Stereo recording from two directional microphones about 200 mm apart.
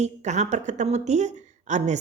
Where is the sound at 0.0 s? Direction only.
35° right (ahead or behind).